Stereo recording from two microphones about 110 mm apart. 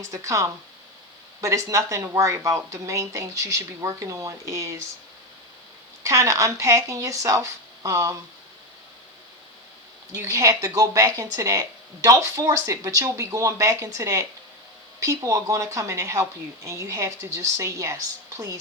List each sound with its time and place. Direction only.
0.1 s speech: 30° right (ahead or behind)
6.0 s speech: 25° right (ahead or behind)
10.1 s speech: 30° right (ahead or behind)